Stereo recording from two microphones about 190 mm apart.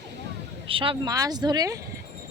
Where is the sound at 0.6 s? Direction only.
30° right (ahead or behind).